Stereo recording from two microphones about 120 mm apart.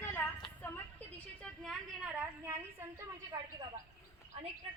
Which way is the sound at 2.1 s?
15° right (ahead or behind).